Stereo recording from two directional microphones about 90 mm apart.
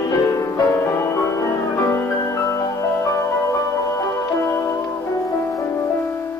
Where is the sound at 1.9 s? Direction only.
30° left (ahead or behind).